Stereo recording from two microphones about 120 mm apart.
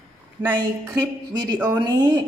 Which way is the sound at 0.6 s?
35° right (ahead or behind).